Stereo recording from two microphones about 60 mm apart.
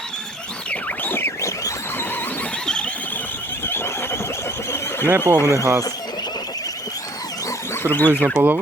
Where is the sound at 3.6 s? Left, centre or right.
Left.